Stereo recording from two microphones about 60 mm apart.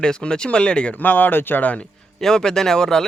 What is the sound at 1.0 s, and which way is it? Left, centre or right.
Speech, left.